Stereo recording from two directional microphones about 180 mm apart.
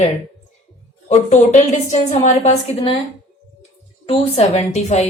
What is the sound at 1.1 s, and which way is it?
A woman's voice, 40° left (ahead or behind).